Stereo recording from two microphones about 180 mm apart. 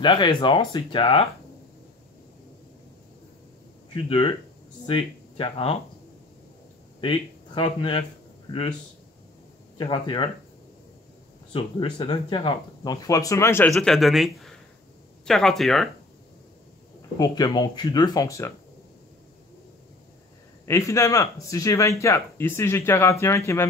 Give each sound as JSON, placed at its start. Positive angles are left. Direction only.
{"t": 0.0, "sound": "speech", "side_deg": 25}
{"t": 3.9, "sound": "speech", "side_deg": 30}
{"t": 7.0, "sound": "speech", "side_deg": 30}
{"t": 9.8, "sound": "speech", "side_deg": 25}
{"t": 11.5, "sound": "speech", "side_deg": 30}
{"t": 13.7, "sound": "speech", "side_deg": 0}
{"t": 17.2, "sound": "speech", "side_deg": 20}
{"t": 20.6, "sound": "speech", "side_deg": 15}